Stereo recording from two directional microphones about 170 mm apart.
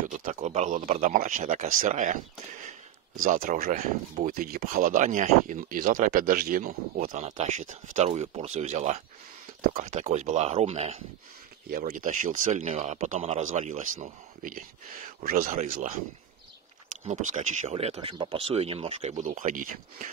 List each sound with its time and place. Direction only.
0.1 s speech: 50° right (ahead or behind)
3.2 s speech: 50° right (ahead or behind)
11.7 s speech: 50° right (ahead or behind)
17.0 s speech: 40° right (ahead or behind)